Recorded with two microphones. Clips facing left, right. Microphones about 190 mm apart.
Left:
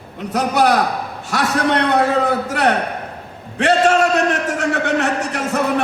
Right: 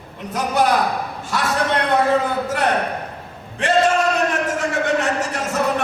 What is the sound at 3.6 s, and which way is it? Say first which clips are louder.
Speech: left 3 dB; 75° left (ahead or behind).